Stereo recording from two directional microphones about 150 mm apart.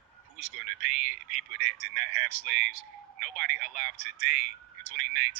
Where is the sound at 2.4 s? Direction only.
55° left (ahead or behind).